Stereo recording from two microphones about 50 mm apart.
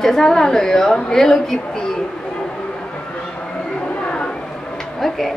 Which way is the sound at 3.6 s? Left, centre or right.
Centre.